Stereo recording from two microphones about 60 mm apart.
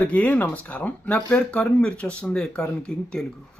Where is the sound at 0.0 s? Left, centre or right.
Left.